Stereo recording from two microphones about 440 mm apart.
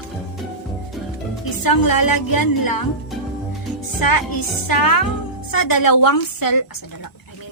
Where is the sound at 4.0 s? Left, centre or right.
Left.